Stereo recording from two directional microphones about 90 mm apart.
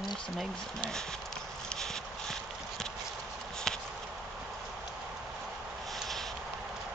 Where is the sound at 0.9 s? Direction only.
5° left (ahead or behind).